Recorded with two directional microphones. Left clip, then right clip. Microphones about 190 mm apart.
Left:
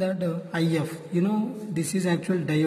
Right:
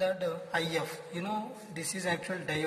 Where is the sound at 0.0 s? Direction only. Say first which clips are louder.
Left 3 dB; centre (ahead or behind).